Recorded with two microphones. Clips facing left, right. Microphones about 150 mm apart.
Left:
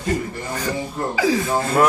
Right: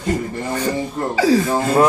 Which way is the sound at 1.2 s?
30° right (ahead or behind).